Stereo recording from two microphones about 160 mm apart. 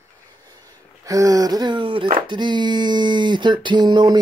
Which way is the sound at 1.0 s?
20° right (ahead or behind).